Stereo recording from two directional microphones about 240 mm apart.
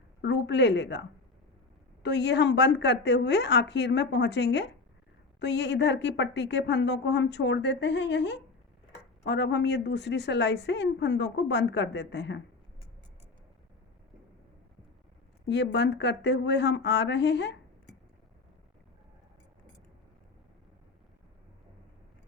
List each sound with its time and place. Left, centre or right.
0.2 s a woman's voice: left
2.0 s a woman's voice: left
15.4 s a woman's voice: left